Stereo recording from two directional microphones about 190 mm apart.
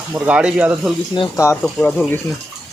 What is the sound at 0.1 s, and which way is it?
Speech, 5° right (ahead or behind).